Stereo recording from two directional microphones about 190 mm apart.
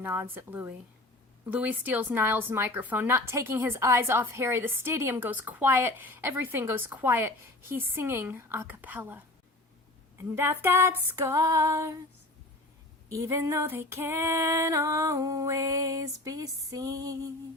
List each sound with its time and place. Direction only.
0.0 s a woman's voice: 10° right (ahead or behind)
13.1 s a woman's voice: 15° right (ahead or behind)